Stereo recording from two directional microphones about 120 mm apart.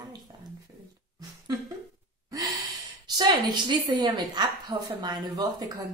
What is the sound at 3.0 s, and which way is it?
A woman's voice, 35° right (ahead or behind).